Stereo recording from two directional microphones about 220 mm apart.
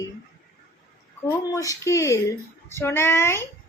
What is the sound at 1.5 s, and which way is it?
A woman's voice, 15° left (ahead or behind).